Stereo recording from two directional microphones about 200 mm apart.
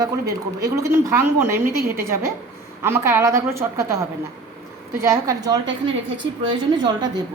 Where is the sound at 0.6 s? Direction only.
15° right (ahead or behind).